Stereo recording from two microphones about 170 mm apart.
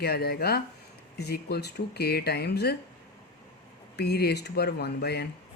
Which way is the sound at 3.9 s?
70° left (ahead or behind).